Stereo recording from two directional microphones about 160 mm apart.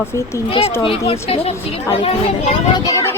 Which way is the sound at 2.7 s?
20° left (ahead or behind).